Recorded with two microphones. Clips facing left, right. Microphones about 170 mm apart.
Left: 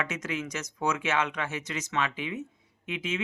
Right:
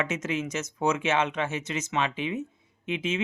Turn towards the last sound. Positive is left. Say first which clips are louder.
# right 4 dB
turn(degrees=-25)  # may be behind; listen again after turning